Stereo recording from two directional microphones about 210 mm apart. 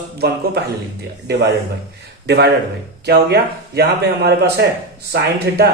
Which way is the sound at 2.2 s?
55° right (ahead or behind).